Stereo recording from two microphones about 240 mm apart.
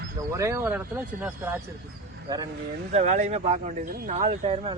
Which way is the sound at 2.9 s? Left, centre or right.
Right.